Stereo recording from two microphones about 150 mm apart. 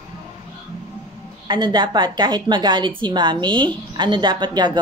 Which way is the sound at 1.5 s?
30° right (ahead or behind).